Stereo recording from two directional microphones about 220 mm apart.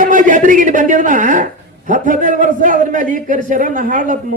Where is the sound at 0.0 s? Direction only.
35° right (ahead or behind).